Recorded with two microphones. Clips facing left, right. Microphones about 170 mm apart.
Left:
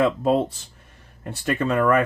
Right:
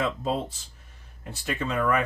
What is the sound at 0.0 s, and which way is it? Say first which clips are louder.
Speech: left 8 dB; 60° left (ahead or behind).